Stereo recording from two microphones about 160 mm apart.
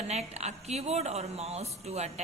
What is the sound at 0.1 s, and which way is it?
A woman's voice, 45° right (ahead or behind).